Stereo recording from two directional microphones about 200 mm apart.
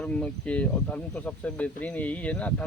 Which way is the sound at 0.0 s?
5° left (ahead or behind).